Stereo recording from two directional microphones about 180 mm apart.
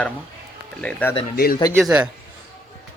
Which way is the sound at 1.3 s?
60° left (ahead or behind).